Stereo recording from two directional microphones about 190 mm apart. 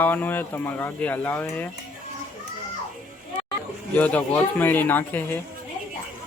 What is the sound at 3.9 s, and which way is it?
Speech, 10° left (ahead or behind).